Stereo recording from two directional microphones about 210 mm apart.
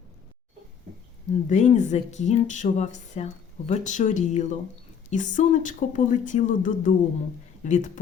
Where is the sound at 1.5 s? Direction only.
35° left (ahead or behind).